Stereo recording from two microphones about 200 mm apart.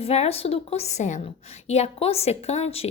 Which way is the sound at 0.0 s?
30° left (ahead or behind).